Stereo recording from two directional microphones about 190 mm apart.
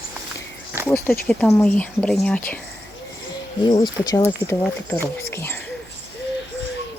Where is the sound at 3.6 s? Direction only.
20° left (ahead or behind).